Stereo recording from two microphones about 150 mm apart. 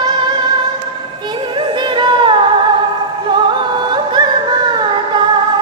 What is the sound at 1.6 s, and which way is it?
Music, 30° right (ahead or behind).